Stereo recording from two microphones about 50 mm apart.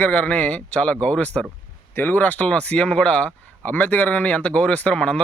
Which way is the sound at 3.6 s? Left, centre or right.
Left.